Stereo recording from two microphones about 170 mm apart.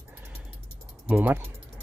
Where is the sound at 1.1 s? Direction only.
10° right (ahead or behind).